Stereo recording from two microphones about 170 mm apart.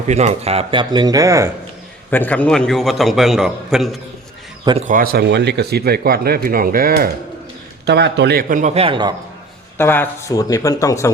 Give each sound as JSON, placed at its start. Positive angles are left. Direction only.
{"t": 0.1, "sound": "speech", "side_deg": -40}
{"t": 2.0, "sound": "a man's voice", "side_deg": 10}
{"t": 4.9, "sound": "speech", "side_deg": -60}
{"t": 7.9, "sound": "a man's voice", "side_deg": -85}
{"t": 9.7, "sound": "speech", "side_deg": 10}